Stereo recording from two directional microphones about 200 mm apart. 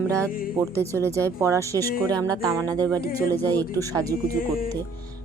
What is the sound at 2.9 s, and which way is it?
Speech, 15° right (ahead or behind).